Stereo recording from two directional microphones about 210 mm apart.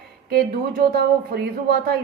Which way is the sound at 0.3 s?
50° right (ahead or behind).